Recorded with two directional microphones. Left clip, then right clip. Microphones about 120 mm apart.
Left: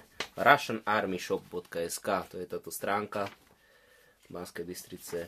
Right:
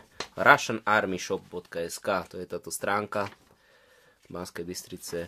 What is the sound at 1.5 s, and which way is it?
Speech, 15° right (ahead or behind).